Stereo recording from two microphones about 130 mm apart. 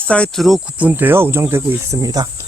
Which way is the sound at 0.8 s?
15° right (ahead or behind).